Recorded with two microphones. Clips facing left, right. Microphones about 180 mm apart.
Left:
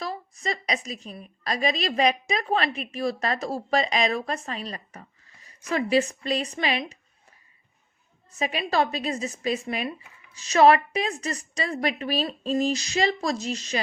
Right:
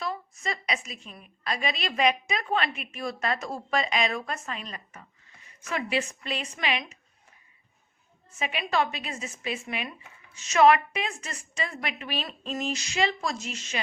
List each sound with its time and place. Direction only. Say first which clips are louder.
0.0 s a woman's voice: left 1 dB; 35° left (ahead or behind)
8.3 s a woman's voice: left 3 dB; 35° left (ahead or behind)